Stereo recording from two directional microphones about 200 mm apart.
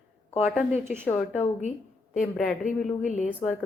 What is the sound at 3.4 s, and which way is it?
Speech, 5° left (ahead or behind).